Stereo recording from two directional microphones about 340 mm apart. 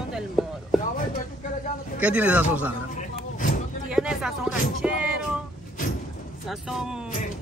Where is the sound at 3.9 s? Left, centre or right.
Centre.